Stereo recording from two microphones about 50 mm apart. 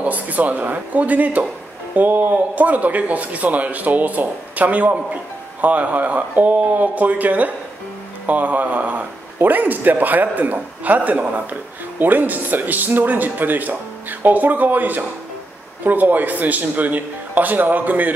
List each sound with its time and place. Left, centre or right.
0.0 s a man's voice: right